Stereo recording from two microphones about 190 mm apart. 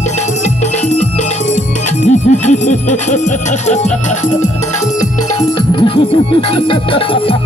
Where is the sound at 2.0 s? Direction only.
35° left (ahead or behind).